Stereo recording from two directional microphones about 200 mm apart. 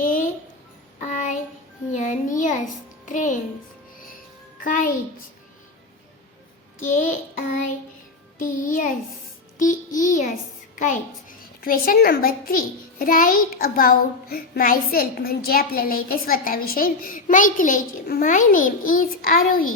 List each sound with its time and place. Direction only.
0.9 s music: 40° left (ahead or behind)
4.6 s music: 45° left (ahead or behind)
6.7 s a sound: 40° left (ahead or behind)
8.4 s music: 40° left (ahead or behind)
9.6 s a sound: 40° left (ahead or behind)
10.8 s a child's voice: 40° left (ahead or behind)